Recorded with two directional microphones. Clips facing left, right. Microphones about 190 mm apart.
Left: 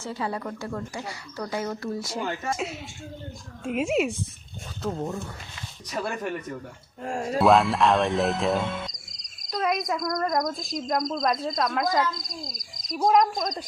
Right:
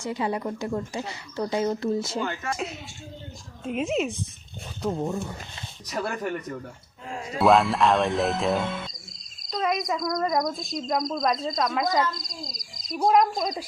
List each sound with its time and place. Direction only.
0.0 s speech: 20° right (ahead or behind)
3.6 s speech: 5° left (ahead or behind)
4.8 s speech: 10° right (ahead or behind)
7.0 s speech: 50° left (ahead or behind)
7.3 s speech: centre (ahead or behind)